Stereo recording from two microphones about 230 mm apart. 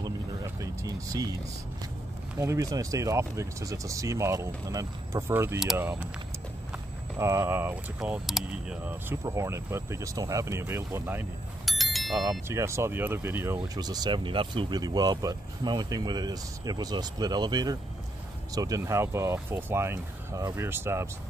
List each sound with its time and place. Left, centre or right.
0.6 s speech: centre
2.3 s speech: centre
12.3 s speech: centre